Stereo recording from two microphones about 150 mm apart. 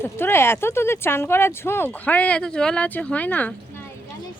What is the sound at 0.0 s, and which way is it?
Speech, 15° left (ahead or behind).